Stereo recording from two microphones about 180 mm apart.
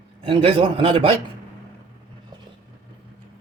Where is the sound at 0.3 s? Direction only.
30° right (ahead or behind).